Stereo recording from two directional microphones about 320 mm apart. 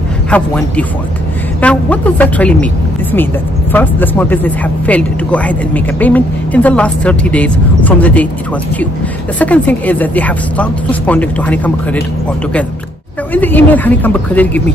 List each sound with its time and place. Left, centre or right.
0.3 s speech: centre
9.4 s speech: centre
13.3 s speech: centre